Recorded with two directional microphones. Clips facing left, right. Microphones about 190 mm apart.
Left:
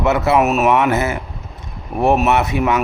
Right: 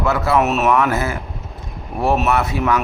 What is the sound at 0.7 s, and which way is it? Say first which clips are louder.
Speech: left 2 dB; 20° left (ahead or behind).